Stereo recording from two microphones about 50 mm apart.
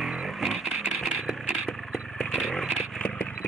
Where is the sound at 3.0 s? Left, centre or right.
Left.